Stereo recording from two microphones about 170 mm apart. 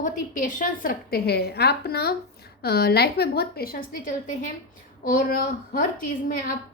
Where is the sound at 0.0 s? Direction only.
50° left (ahead or behind).